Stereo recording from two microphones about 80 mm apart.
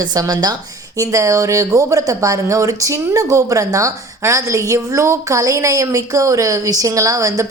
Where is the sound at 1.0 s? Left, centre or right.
Right.